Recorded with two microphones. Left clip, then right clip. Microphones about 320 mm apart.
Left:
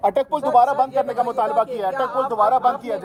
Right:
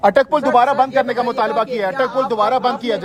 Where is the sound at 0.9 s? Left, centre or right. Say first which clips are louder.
Right 3 dB; right.